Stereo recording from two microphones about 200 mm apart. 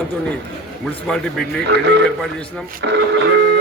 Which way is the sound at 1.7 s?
60° right (ahead or behind).